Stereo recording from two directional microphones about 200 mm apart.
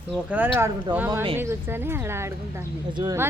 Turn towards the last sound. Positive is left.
turn(degrees=-20)  # may be behind; listen again after turning